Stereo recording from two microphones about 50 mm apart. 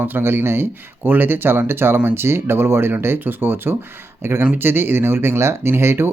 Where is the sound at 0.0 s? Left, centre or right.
Right.